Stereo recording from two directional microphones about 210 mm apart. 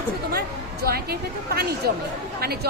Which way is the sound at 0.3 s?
45° right (ahead or behind).